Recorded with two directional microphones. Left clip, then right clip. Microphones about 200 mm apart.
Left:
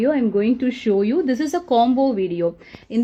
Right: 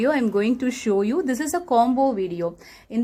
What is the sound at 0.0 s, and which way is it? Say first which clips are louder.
A woman's voice: left 2 dB; 15° left (ahead or behind).